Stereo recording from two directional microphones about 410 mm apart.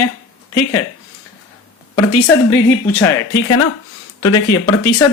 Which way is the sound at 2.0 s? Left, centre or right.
Left.